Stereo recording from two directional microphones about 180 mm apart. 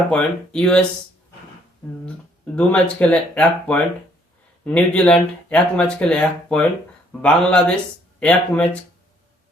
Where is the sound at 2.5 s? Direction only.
5° left (ahead or behind).